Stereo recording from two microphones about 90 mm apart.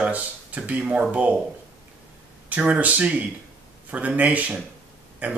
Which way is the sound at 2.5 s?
15° right (ahead or behind).